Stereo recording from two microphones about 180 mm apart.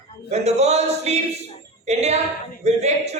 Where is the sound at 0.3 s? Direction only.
35° right (ahead or behind).